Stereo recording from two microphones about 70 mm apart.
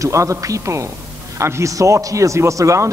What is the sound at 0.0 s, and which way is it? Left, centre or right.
A man's voice, right.